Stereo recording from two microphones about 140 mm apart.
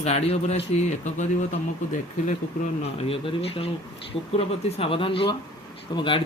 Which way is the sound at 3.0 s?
45° left (ahead or behind).